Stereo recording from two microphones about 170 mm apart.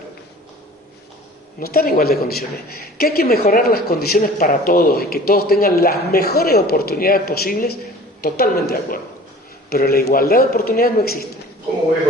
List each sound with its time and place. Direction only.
1.5 s speech: 60° left (ahead or behind)